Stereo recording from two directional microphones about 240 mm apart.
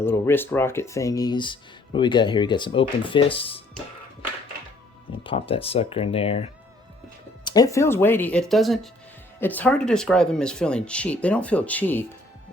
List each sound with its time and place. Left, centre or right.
0.0 s speech: centre
5.2 s speech: left